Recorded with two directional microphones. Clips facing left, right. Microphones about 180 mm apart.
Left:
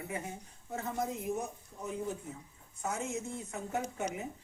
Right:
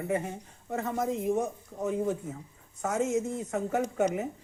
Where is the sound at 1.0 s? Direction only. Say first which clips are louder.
Right 8 dB; 90° right.